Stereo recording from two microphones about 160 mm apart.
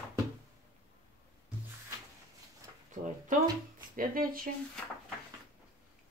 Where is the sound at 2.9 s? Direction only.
55° right (ahead or behind).